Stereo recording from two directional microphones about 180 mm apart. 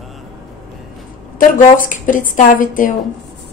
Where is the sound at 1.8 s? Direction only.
45° left (ahead or behind).